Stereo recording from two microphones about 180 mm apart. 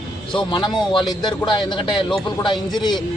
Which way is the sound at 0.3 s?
25° left (ahead or behind).